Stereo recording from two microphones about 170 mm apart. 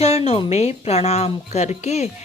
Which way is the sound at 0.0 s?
35° left (ahead or behind).